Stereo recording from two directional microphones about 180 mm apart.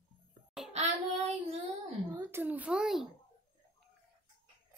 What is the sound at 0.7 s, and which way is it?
Child singing, 35° right (ahead or behind).